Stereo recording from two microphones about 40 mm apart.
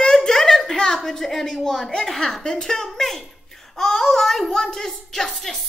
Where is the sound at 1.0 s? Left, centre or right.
Centre.